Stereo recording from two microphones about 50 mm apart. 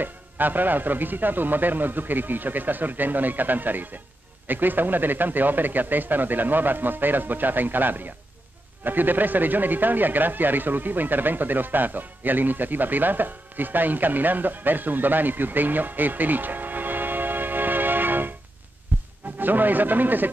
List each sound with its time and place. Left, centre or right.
0.0 s speech: right
18.9 s music: right
19.3 s speech: right